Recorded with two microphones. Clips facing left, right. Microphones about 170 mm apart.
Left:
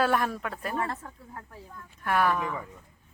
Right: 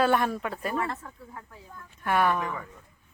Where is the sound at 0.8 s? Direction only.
35° left (ahead or behind).